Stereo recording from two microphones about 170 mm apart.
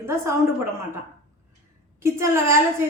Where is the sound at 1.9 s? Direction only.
15° right (ahead or behind).